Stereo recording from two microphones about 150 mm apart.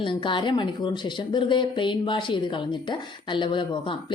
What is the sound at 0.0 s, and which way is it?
Speech, 30° left (ahead or behind).